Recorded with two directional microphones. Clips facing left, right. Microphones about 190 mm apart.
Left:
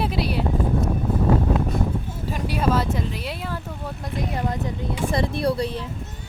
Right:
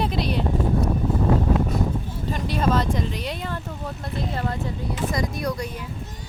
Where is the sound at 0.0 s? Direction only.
5° left (ahead or behind).